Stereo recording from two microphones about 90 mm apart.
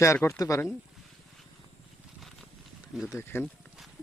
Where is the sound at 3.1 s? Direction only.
25° left (ahead or behind).